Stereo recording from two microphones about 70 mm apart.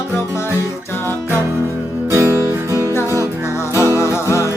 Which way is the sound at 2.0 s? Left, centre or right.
Right.